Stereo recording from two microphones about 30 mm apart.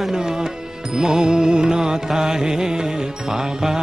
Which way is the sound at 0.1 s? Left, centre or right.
Centre.